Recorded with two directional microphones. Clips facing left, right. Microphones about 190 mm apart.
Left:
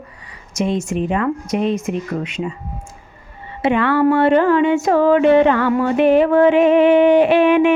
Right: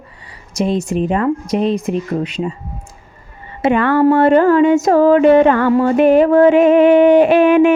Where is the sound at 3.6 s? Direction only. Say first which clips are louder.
Right 3 dB; 45° right (ahead or behind).